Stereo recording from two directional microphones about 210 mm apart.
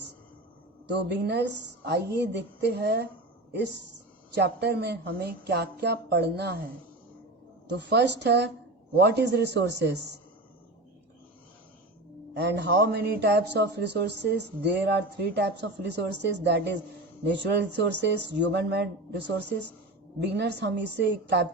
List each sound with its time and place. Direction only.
0.9 s a man's voice: 55° right (ahead or behind)
7.8 s a man's voice: 55° right (ahead or behind)
12.3 s a man's voice: 55° right (ahead or behind)